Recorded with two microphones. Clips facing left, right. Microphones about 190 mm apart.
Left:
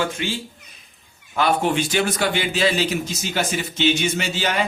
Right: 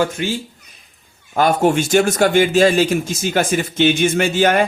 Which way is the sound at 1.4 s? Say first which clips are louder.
Right 5 dB; 45° right (ahead or behind).